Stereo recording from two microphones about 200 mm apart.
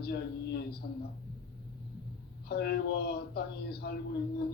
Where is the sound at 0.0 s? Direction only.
55° left (ahead or behind).